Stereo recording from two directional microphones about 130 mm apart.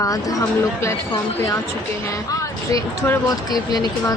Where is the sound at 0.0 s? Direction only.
25° left (ahead or behind).